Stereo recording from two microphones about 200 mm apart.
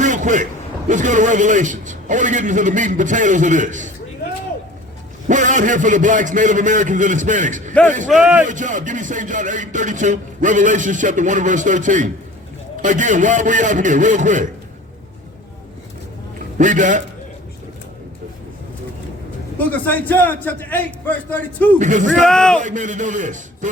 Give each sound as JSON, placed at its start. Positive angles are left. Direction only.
{"t": 0.0, "sound": "a sound", "side_deg": -40}
{"t": 0.9, "sound": "speech", "side_deg": -40}
{"t": 5.3, "sound": "speech", "side_deg": -40}
{"t": 7.7, "sound": "a man's voice", "side_deg": 5}
{"t": 8.4, "sound": "speech", "side_deg": -40}
{"t": 16.6, "sound": "speech", "side_deg": -40}
{"t": 19.5, "sound": "a man's voice", "side_deg": 10}
{"t": 21.8, "sound": "speech", "side_deg": -40}
{"t": 22.3, "sound": "a man's voice", "side_deg": 5}
{"t": 22.6, "sound": "speech", "side_deg": -40}